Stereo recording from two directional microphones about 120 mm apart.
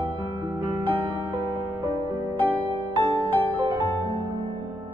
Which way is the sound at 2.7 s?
45° right (ahead or behind).